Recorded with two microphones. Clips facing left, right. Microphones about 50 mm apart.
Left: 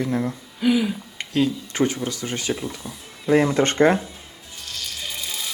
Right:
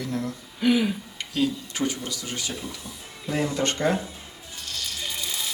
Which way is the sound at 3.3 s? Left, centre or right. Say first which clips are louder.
Left 8 dB; left.